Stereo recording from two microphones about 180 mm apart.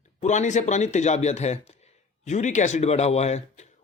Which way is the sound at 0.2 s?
40° left (ahead or behind).